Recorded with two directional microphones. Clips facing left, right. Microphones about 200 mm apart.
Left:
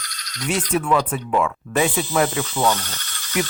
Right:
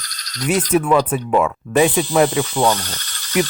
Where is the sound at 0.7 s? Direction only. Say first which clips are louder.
Right 4 dB; 20° right (ahead or behind).